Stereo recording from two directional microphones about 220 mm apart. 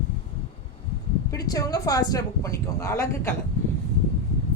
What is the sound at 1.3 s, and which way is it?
A woman's voice, 15° left (ahead or behind).